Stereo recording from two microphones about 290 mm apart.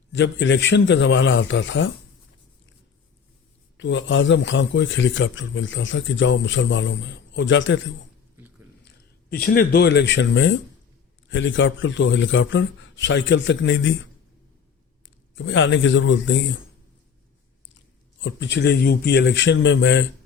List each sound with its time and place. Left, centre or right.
0.1 s a man's voice: left
3.8 s a man's voice: left
9.3 s a man's voice: left
15.4 s a man's voice: left
17.7 s speech: left